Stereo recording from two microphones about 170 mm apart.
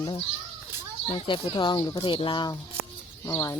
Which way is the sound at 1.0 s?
25° left (ahead or behind).